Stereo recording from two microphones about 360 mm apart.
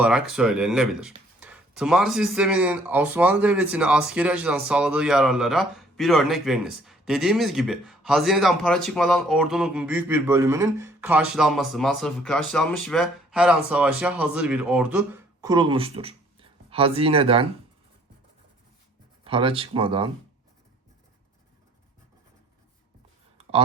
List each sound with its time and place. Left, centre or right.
0.0 s speech: centre
19.2 s speech: centre
23.4 s a sound: centre